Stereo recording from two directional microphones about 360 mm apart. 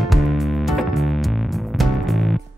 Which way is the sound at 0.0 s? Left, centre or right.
Centre.